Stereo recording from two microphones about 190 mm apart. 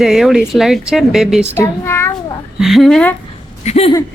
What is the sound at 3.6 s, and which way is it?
Speech, 35° left (ahead or behind).